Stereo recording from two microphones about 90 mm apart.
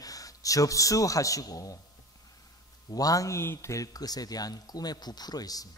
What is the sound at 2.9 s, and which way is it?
A man's voice, 40° left (ahead or behind).